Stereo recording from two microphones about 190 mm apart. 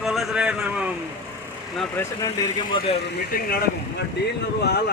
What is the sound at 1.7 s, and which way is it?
Speech, 10° left (ahead or behind).